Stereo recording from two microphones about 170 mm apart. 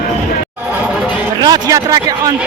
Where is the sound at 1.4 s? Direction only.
20° right (ahead or behind).